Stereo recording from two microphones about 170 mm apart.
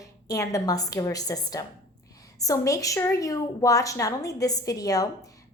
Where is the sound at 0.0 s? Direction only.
20° left (ahead or behind).